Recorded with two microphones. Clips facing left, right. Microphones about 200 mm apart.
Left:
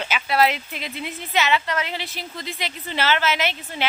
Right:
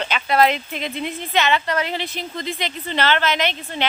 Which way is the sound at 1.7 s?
45° right (ahead or behind).